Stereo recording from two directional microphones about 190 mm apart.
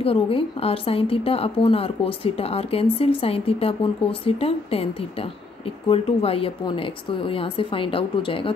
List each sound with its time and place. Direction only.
0.0 s a woman's voice: 30° left (ahead or behind)
5.9 s a woman's voice: 30° left (ahead or behind)